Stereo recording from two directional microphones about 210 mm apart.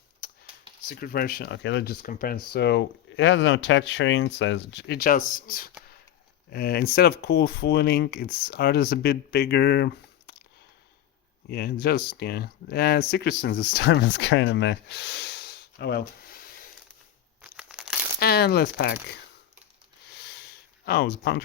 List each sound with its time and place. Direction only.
0.2 s computer keyboard: 45° left (ahead or behind)
0.9 s speech: 45° left (ahead or behind)
11.4 s speech: 50° left (ahead or behind)
17.4 s crumpling: 5° right (ahead or behind)
18.2 s speech: 50° left (ahead or behind)
20.1 s a sound: 50° left (ahead or behind)